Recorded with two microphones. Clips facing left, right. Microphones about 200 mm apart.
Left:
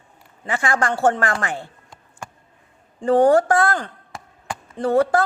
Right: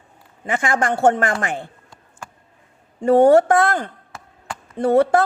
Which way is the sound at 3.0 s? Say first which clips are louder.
Right 3 dB; 25° right (ahead or behind).